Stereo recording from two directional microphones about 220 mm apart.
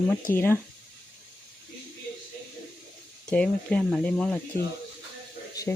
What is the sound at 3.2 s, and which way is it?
Speech, 5° left (ahead or behind).